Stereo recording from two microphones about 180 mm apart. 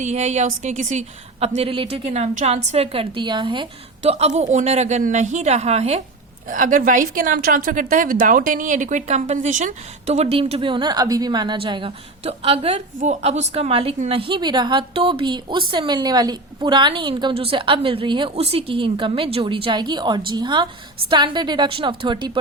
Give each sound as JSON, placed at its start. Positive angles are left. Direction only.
{"t": 0.0, "sound": "a woman's voice", "side_deg": -40}
{"t": 6.5, "sound": "a woman's voice", "side_deg": -45}